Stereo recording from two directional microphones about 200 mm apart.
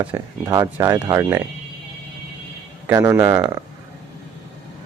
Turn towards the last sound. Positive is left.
turn(degrees=-15)  # may be behind; listen again after turning